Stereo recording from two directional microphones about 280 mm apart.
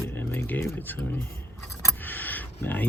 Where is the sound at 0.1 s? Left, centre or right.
Centre.